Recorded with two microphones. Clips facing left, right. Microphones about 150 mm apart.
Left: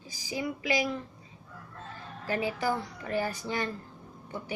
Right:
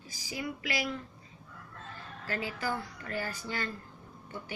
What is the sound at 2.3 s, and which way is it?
A woman's voice, 15° left (ahead or behind).